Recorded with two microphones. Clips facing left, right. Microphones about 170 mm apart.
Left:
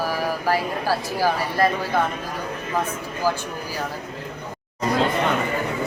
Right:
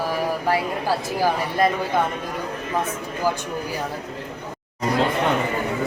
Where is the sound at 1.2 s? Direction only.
20° right (ahead or behind).